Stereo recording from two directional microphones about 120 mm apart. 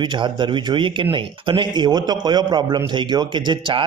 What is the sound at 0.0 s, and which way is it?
A man's voice, 40° right (ahead or behind).